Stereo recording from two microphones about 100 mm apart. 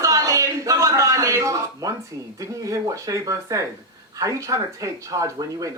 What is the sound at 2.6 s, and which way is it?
Speech, 30° right (ahead or behind).